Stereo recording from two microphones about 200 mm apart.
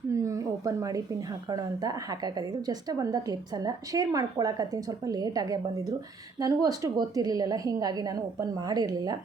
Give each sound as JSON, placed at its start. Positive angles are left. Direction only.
{"t": 0.1, "sound": "a woman's voice", "side_deg": -15}